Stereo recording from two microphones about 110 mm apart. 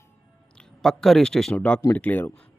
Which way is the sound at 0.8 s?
5° left (ahead or behind).